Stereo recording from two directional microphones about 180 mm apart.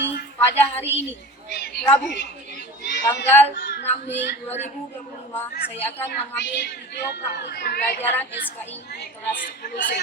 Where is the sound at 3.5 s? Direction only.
55° left (ahead or behind).